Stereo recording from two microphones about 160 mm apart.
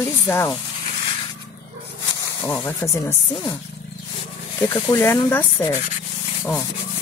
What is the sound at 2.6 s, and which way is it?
Speech, 15° left (ahead or behind).